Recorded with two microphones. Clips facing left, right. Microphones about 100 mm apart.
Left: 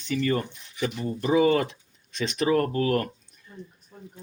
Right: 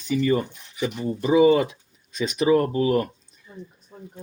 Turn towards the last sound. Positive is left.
turn(degrees=-20)  # may be behind; listen again after turning